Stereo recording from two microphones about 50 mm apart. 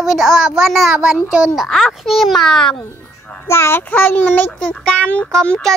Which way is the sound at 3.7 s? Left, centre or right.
Left.